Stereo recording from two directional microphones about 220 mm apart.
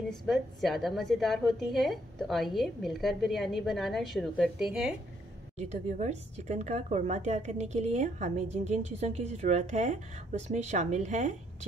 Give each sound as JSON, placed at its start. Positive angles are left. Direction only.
{"t": 0.2, "sound": "a woman's voice", "side_deg": 0}
{"t": 5.6, "sound": "a woman's voice", "side_deg": -30}